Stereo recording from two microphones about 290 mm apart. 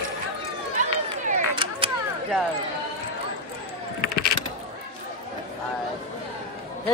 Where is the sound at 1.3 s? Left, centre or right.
Centre.